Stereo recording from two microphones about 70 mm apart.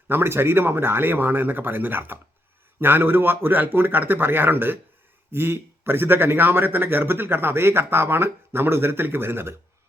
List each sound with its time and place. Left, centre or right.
0.1 s a man's voice: right